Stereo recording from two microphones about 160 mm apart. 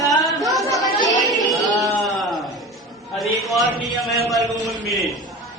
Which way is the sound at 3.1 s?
Centre (ahead or behind).